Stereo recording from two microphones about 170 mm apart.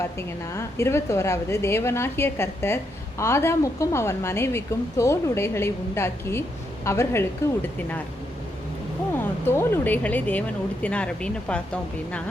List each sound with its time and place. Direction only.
0.0 s a woman's voice: 15° left (ahead or behind)
9.5 s a woman's voice: 15° left (ahead or behind)